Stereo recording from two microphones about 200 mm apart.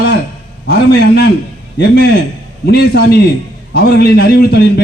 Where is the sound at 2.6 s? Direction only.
50° left (ahead or behind).